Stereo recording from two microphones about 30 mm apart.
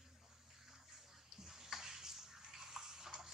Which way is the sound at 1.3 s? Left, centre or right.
Centre.